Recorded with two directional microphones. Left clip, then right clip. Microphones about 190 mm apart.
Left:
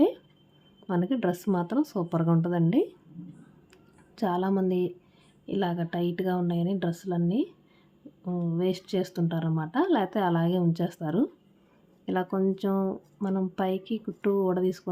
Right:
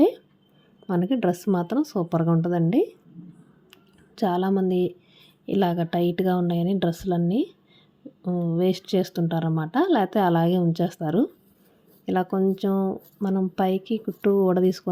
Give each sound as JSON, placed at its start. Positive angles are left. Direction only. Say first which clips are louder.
{"t": 0.9, "sound": "speech", "louder": "right 4 dB", "side_deg": -20}
{"t": 3.7, "sound": "a sound", "louder": "right 3 dB", "side_deg": -20}
{"t": 4.6, "sound": "speech", "louder": "right 4 dB", "side_deg": -20}